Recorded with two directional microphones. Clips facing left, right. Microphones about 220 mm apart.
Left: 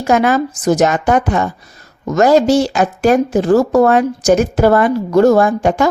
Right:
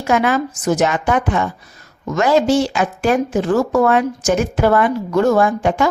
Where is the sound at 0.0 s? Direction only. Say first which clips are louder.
Left 3 dB; 40° left (ahead or behind).